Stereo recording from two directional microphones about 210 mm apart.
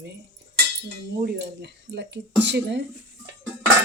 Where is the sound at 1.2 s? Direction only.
55° right (ahead or behind).